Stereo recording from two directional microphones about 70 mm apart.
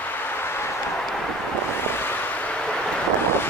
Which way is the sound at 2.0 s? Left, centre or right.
Left.